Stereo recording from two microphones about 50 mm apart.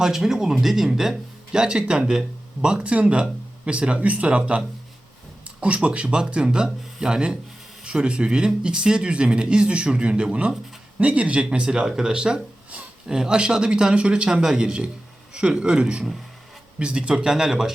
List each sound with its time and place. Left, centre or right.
0.0 s a man's voice: centre